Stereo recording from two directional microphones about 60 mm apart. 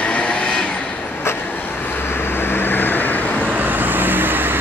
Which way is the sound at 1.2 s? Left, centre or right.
Left.